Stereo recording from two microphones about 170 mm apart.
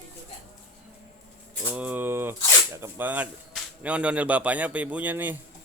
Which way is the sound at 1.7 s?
10° right (ahead or behind).